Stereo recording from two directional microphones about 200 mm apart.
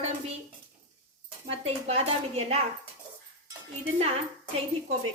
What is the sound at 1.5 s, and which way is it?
Speech, 30° right (ahead or behind).